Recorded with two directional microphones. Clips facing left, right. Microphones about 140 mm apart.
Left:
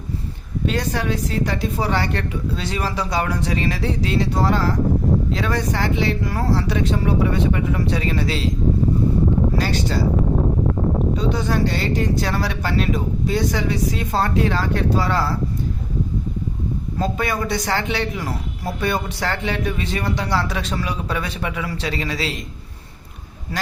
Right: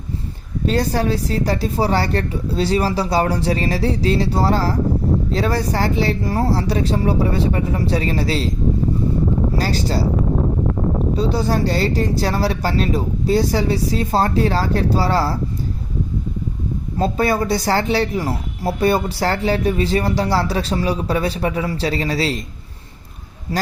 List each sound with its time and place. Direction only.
0.6 s speech: 35° right (ahead or behind)
9.6 s speech: 35° right (ahead or behind)
11.2 s speech: 35° right (ahead or behind)
17.0 s speech: 35° right (ahead or behind)